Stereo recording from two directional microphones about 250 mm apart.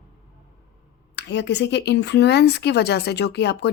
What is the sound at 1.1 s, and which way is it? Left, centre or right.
A woman's voice, left.